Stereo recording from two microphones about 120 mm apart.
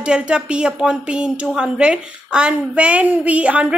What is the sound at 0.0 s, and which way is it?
Speech, 10° right (ahead or behind).